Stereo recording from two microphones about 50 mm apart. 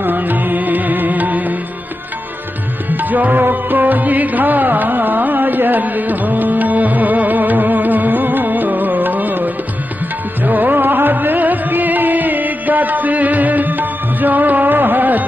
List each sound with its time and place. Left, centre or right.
0.0 s music: right
2.9 s music: right